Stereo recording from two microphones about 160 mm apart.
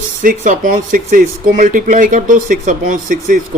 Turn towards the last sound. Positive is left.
turn(degrees=-55)  # may be behind; listen again after turning